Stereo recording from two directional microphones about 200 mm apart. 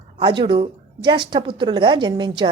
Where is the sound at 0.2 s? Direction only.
25° right (ahead or behind).